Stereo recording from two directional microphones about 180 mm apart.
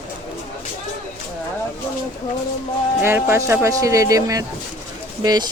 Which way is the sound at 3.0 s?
15° right (ahead or behind).